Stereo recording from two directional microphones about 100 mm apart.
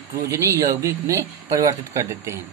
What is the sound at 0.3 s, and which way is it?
A woman's voice, 30° right (ahead or behind).